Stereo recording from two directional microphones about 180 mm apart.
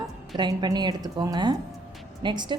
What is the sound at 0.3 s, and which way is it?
A woman's voice, 25° right (ahead or behind).